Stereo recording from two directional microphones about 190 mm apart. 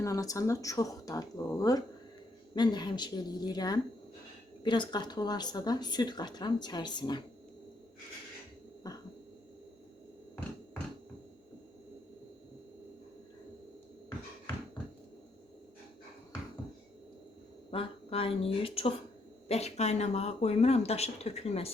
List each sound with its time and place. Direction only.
0.0 s speech: 15° left (ahead or behind)
8.8 s owl: 20° left (ahead or behind)
17.7 s a sound: 30° left (ahead or behind)
19.5 s speech: 35° left (ahead or behind)